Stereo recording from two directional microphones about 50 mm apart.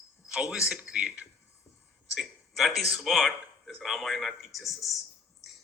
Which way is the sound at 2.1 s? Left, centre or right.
Centre.